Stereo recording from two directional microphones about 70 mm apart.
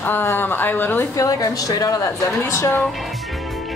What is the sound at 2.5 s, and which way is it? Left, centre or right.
Speech, left.